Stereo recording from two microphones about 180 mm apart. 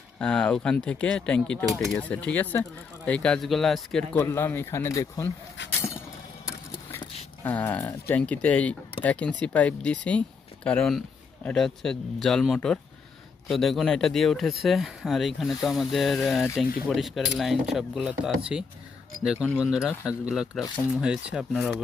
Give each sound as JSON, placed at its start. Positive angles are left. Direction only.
{"t": 0.2, "sound": "speech", "side_deg": 5}
{"t": 6.7, "sound": "vehicle", "side_deg": 20}
{"t": 7.4, "sound": "speech", "side_deg": 10}
{"t": 21.5, "sound": "speech", "side_deg": 5}